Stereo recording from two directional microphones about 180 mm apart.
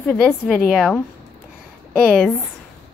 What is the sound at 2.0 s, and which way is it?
Speech, centre (ahead or behind).